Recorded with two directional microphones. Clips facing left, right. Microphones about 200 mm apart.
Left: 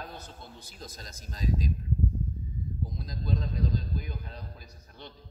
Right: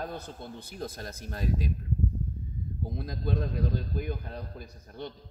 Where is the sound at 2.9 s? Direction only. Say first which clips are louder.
Right 4 dB; 60° right (ahead or behind).